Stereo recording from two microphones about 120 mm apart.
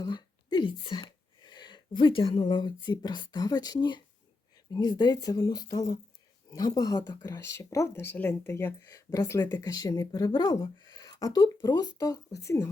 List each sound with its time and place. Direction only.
0.0 s whispering: 35° left (ahead or behind)
1.4 s speech: 40° left (ahead or behind)